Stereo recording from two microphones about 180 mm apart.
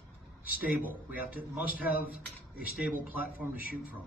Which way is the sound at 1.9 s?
55° left (ahead or behind).